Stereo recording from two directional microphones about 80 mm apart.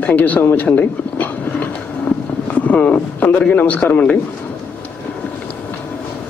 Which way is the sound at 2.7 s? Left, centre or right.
Left.